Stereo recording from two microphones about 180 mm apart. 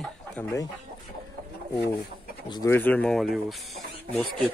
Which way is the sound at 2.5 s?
25° left (ahead or behind).